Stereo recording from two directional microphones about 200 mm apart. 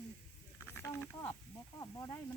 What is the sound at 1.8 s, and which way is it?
Snake, 15° left (ahead or behind).